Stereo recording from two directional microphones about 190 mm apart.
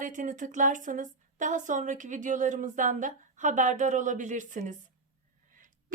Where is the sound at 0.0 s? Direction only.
40° right (ahead or behind).